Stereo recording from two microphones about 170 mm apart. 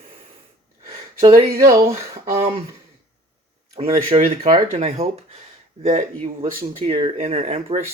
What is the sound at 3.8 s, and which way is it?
Speech, 35° right (ahead or behind).